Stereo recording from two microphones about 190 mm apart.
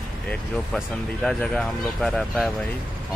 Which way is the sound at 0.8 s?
Centre (ahead or behind).